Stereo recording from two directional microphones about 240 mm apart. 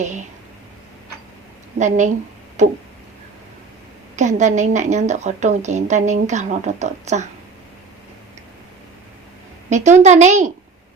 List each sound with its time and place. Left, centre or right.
0.0 s speech: right
1.8 s a woman's voice: right
4.1 s a woman's voice: right
9.6 s a woman's voice: right